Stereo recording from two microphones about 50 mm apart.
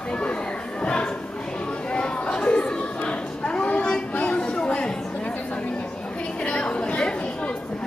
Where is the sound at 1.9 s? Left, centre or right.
Left.